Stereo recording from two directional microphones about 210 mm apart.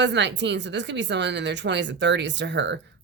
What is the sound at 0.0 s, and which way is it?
Speech, 55° right (ahead or behind).